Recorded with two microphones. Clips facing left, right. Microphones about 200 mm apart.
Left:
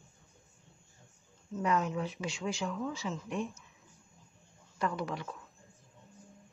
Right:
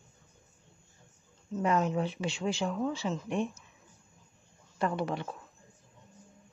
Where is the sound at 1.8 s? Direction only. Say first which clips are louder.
Right 4 dB; 30° right (ahead or behind).